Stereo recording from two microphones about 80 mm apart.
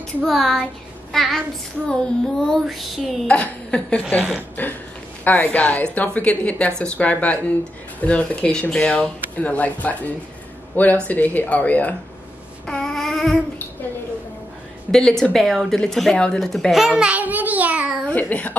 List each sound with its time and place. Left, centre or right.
0.2 s a woman's voice: centre
3.3 s a woman's voice: centre
12.6 s a sound: centre
14.9 s a woman's voice: centre
16.9 s a sound: centre
18.0 s a child's voice: centre